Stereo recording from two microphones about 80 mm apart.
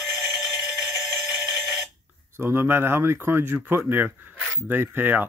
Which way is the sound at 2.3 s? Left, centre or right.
Right.